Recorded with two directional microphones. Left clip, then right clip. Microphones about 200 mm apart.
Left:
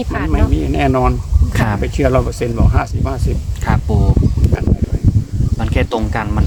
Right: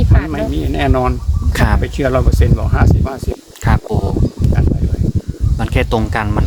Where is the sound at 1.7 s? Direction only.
Centre (ahead or behind).